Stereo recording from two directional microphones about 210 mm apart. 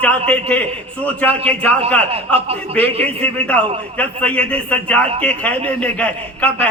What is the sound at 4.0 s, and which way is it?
A man's voice, 5° left (ahead or behind).